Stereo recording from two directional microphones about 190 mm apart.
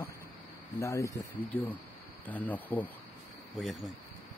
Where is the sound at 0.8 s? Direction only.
15° left (ahead or behind); by 3.9 s centre (ahead or behind).